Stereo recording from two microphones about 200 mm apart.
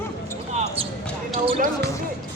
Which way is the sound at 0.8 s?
30° right (ahead or behind).